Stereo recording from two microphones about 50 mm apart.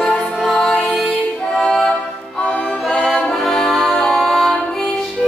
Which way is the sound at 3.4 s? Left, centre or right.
Centre.